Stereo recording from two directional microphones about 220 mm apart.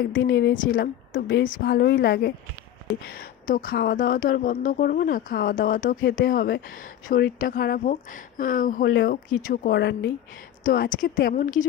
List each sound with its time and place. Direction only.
0.1 s a woman's voice: 50° left (ahead or behind)
10.6 s a woman's voice: 40° left (ahead or behind)